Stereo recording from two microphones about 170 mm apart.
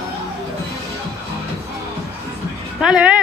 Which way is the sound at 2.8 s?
5° right (ahead or behind).